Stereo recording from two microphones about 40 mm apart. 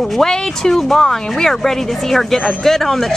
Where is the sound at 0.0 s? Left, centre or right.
Centre.